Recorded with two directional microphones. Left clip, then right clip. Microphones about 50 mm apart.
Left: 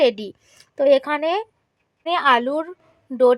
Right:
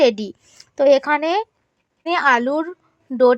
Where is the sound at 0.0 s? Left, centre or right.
Right.